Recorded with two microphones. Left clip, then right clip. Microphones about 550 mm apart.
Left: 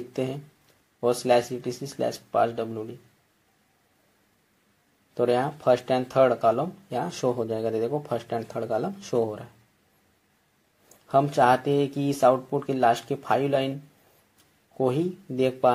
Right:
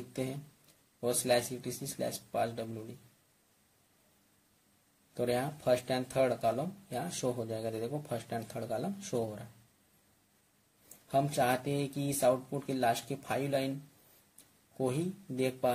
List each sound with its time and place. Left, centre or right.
0.1 s speech: right
5.1 s speech: right
11.1 s speech: right
14.8 s speech: right